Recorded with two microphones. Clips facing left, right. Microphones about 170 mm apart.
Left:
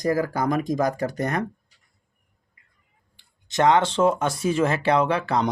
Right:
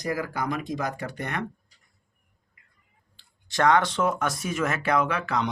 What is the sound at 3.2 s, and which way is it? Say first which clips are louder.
Speech: left 3 dB; 20° left (ahead or behind).